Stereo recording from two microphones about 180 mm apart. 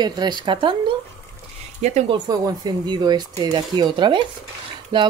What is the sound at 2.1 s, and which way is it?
Speech, 25° right (ahead or behind).